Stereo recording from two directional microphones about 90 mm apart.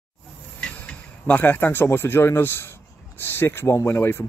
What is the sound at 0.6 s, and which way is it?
Speech, 15° left (ahead or behind).